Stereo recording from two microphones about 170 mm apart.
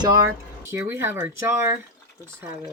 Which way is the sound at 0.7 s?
15° right (ahead or behind).